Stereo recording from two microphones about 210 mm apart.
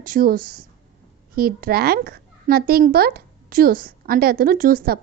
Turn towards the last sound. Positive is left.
turn(degrees=-45)  # may be behind; listen again after turning